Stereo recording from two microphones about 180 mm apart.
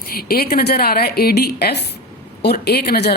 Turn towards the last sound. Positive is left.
turn(degrees=65)  # may be behind; listen again after turning